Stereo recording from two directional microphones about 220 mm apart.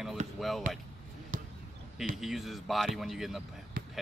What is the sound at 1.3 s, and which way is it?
Basketball bounce, 40° right (ahead or behind).